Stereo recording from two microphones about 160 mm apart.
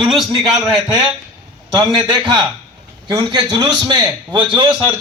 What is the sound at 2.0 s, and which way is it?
A man's voice, 25° right (ahead or behind).